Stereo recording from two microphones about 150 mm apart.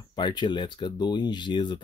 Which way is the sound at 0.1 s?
30° left (ahead or behind).